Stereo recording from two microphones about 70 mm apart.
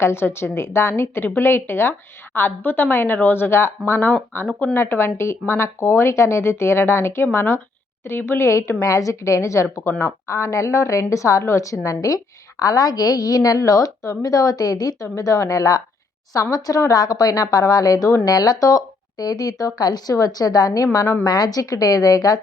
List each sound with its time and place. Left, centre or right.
0.0 s a woman's voice: left
15.0 s a woman's voice: left
21.2 s a woman's voice: left